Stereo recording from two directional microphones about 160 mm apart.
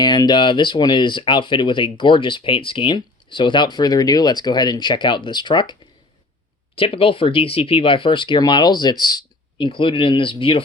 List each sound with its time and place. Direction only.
0.0 s speech: 25° left (ahead or behind)
6.7 s speech: 35° left (ahead or behind)